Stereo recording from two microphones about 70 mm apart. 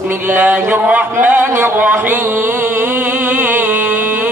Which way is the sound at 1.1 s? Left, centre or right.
Right.